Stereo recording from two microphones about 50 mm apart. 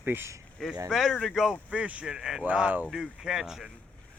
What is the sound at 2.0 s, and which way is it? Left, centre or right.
Speech, centre.